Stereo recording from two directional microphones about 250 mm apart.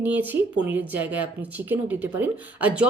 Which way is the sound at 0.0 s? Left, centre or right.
Centre.